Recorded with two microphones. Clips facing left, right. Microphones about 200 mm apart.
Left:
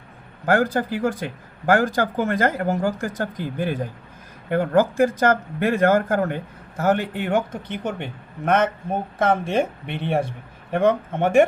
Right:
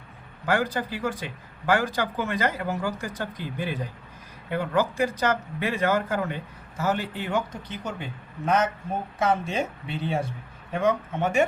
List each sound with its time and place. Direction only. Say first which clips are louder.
0.4 s speech: left 6 dB; 50° left (ahead or behind)